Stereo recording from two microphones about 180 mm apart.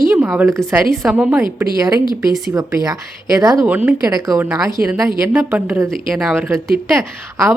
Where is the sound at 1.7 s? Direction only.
20° right (ahead or behind).